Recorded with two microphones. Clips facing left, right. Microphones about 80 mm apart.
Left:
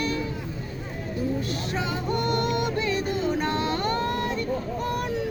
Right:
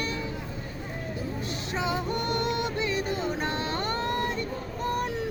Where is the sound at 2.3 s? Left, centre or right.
Right.